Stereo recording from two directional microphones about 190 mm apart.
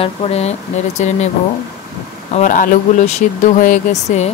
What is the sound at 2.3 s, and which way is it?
Speech, 45° left (ahead or behind).